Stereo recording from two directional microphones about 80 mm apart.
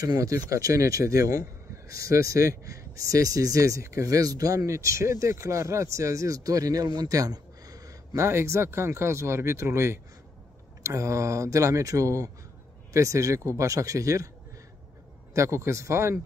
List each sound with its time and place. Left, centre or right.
0.0 s speech: right
7.0 s a sound: right
8.2 s speech: right
15.3 s speech: right